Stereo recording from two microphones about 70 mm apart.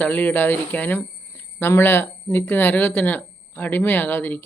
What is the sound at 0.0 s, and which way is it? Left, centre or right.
Speech, left.